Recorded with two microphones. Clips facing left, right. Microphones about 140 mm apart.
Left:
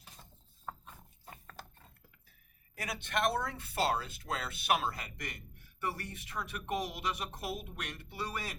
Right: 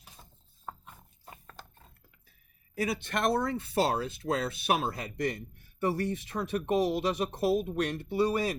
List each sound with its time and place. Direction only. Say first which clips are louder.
0.0 s a sound: right 1 dB; 10° right (ahead or behind)
1.2 s mechanisms: right 1 dB; 5° right (ahead or behind)
2.8 s speech: right 4 dB; 30° right (ahead or behind)